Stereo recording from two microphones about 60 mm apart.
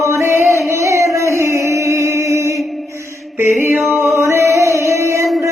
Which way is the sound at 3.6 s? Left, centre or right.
Right.